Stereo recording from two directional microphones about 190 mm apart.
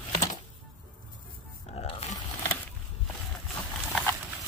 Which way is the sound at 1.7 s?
30° left (ahead or behind).